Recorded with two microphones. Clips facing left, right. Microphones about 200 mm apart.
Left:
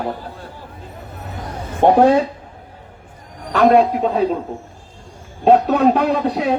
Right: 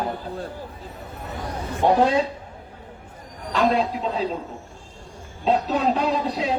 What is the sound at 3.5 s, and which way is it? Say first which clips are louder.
Speech: left 8 dB; 65° left (ahead or behind).